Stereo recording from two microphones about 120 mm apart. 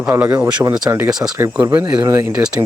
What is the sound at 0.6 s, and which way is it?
Speech, 35° right (ahead or behind).